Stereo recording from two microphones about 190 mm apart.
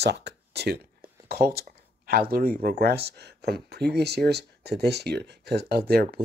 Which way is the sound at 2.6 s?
50° right (ahead or behind).